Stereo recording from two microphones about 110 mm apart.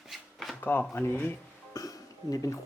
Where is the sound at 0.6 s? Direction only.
15° left (ahead or behind).